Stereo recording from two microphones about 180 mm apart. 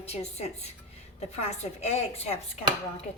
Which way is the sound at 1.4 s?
35° left (ahead or behind).